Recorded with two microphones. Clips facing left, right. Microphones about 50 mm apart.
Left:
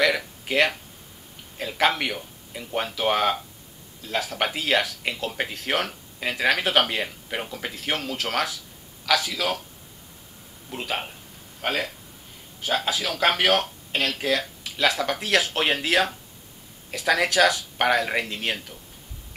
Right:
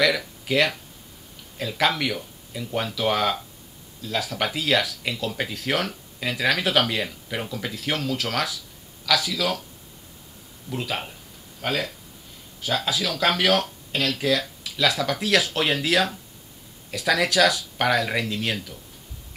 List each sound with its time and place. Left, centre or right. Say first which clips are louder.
0.5 s speech: even; left
10.7 s speech: right 1 dB; centre